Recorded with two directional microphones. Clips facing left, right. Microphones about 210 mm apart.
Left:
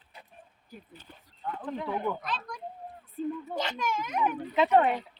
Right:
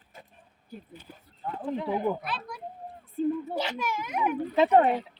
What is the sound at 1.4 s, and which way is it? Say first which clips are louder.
Speech: right 1 dB; 30° right (ahead or behind).